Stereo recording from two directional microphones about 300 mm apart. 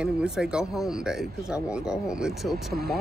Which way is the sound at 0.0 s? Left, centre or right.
Centre.